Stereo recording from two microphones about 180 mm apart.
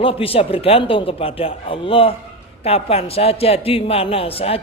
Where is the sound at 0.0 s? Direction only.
30° left (ahead or behind).